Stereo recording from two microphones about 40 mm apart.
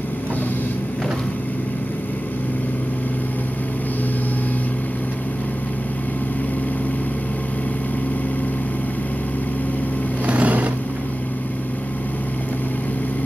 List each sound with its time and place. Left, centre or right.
10.2 s vehicle: right